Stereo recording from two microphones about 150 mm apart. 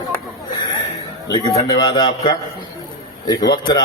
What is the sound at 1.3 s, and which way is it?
A man's voice, 30° left (ahead or behind).